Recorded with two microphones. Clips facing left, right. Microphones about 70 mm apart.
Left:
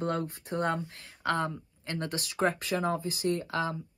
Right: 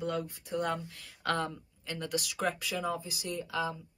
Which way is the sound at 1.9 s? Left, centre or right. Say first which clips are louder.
Left 1 dB; left.